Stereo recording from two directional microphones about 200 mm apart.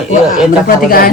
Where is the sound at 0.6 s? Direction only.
45° left (ahead or behind).